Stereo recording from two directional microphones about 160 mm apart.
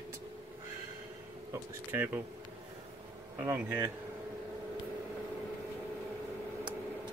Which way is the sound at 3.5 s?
15° right (ahead or behind).